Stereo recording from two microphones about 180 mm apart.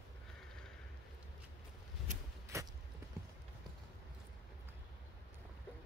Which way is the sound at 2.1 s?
45° right (ahead or behind).